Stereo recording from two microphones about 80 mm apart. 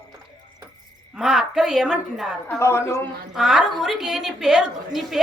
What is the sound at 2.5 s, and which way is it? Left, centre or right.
Speech, left.